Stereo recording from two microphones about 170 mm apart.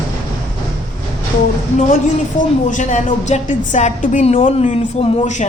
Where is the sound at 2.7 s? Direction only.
45° left (ahead or behind).